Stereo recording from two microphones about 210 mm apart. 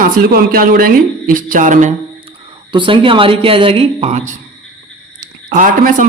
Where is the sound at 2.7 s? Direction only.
25° right (ahead or behind).